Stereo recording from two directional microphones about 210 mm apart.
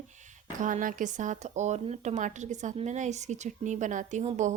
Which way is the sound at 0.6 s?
40° right (ahead or behind).